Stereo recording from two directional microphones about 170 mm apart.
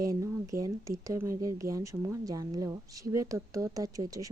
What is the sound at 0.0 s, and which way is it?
Speech, 20° right (ahead or behind).